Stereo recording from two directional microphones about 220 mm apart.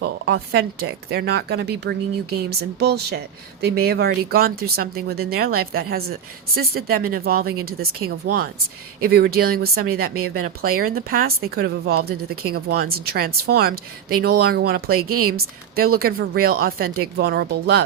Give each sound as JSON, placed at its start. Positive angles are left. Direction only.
{"t": 0.0, "sound": "speech", "side_deg": -45}